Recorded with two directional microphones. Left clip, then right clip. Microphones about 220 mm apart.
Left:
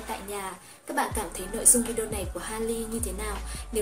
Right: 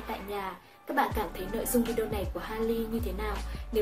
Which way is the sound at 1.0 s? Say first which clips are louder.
Even; centre (ahead or behind).